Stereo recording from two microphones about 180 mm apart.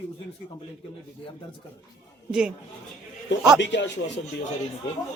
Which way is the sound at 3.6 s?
75° left (ahead or behind).